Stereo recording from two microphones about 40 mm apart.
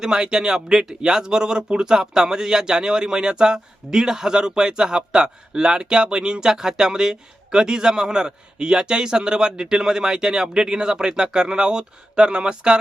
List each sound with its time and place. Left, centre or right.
0.0 s speech: centre